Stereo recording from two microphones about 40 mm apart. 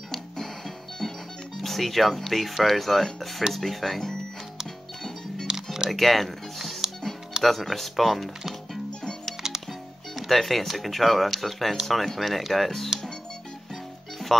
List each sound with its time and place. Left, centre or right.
1.6 s speech: centre
5.5 s camera: centre
5.9 s speech: centre
9.7 s speech: centre